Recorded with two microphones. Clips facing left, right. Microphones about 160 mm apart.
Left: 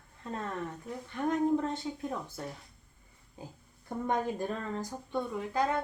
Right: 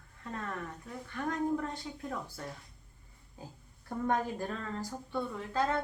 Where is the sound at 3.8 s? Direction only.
20° left (ahead or behind).